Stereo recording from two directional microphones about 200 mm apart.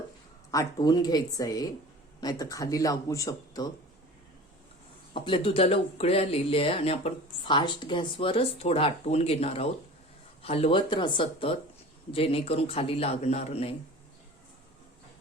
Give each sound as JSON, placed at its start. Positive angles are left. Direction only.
{"t": 0.5, "sound": "a man's voice", "side_deg": 20}
{"t": 5.1, "sound": "speech", "side_deg": 25}